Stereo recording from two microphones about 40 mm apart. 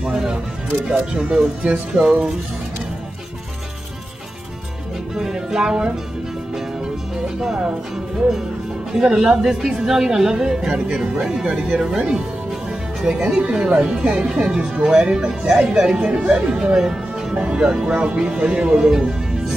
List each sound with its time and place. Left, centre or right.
0.0 s music: centre
0.8 s speech: centre
5.1 s music: centre
9.0 s a woman's voice: centre
16.0 s speech: right
16.5 s speech: centre
17.4 s a woman's voice: right